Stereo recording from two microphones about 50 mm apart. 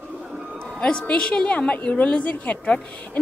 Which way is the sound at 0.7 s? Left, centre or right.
Centre.